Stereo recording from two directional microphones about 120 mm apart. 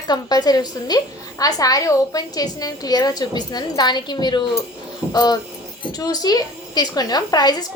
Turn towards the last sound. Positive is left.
turn(degrees=35)  # may be behind; listen again after turning